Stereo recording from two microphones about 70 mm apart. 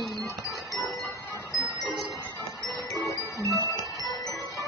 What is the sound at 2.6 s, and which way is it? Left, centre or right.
Music, left.